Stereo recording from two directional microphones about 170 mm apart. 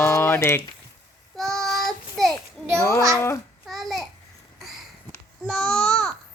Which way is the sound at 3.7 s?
Centre (ahead or behind).